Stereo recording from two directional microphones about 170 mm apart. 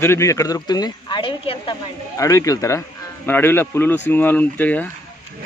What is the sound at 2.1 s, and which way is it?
A man's voice, 20° left (ahead or behind).